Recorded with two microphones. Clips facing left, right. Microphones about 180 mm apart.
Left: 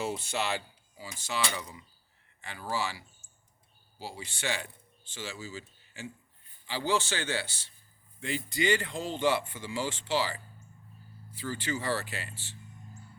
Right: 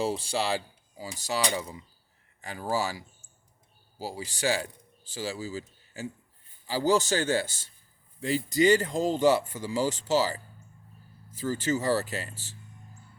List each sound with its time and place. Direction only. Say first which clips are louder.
0.0 s a man's voice: right 4 dB; 30° right (ahead or behind)